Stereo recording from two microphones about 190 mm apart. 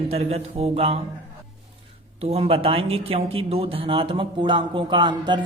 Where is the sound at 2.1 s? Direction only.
30° right (ahead or behind).